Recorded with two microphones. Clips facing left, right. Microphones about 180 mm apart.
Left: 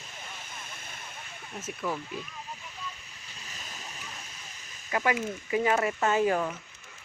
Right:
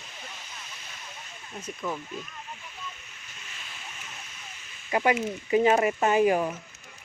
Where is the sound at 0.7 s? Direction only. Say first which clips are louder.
Left 1 dB; 50° left (ahead or behind).